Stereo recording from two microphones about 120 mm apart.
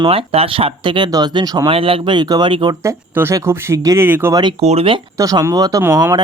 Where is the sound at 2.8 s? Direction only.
25° right (ahead or behind).